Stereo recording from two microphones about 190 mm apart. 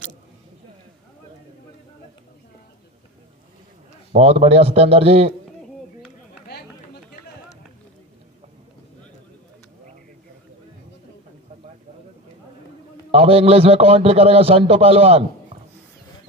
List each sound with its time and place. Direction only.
4.1 s a man's voice: 35° right (ahead or behind)
13.1 s a man's voice: 30° right (ahead or behind)